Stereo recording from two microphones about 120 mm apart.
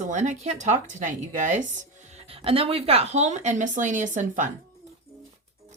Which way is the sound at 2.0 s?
60° right (ahead or behind).